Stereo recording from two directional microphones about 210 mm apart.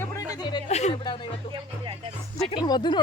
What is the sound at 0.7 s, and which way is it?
Speech, 30° left (ahead or behind).